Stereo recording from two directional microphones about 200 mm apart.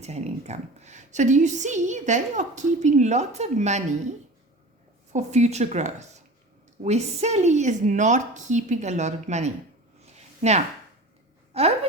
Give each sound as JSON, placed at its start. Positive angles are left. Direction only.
{"t": 0.0, "sound": "a woman's voice", "side_deg": -35}
{"t": 5.1, "sound": "a woman's voice", "side_deg": -35}
{"t": 11.5, "sound": "a woman's voice", "side_deg": -30}